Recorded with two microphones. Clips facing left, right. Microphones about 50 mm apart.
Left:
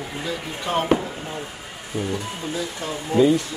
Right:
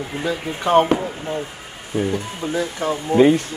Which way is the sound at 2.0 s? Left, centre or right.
Right.